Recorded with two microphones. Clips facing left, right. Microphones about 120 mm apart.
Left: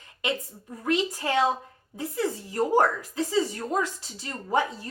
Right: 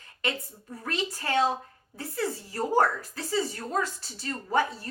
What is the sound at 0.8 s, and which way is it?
Speech, 15° left (ahead or behind).